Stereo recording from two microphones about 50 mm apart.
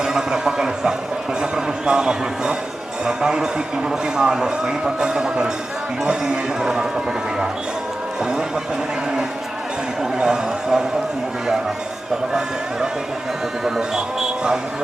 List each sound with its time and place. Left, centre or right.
0.0 s a sound: centre
3.1 s speech: centre
8.2 s speech: centre
10.2 s speech: centre
13.7 s speech: centre